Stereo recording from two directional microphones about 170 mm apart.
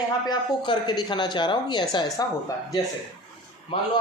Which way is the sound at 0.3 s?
25° left (ahead or behind).